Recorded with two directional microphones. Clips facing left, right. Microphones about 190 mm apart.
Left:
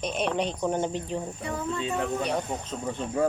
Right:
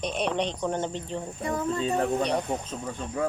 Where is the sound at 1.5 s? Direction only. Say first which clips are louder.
Right 5 dB; 40° right (ahead or behind).